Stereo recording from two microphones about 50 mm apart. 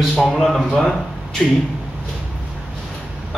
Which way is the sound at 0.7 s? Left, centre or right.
Centre.